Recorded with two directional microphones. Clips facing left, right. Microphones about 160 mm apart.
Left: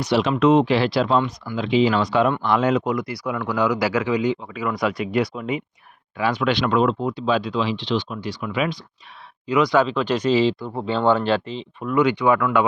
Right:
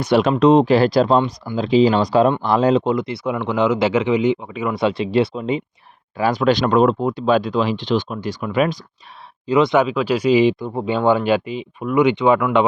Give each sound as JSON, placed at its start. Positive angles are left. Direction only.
{"t": 0.0, "sound": "speech", "side_deg": -50}
{"t": 0.3, "sound": "speech", "side_deg": -35}
{"t": 6.1, "sound": "speech", "side_deg": -40}
{"t": 9.5, "sound": "speech", "side_deg": -25}
{"t": 9.8, "sound": "speech", "side_deg": -10}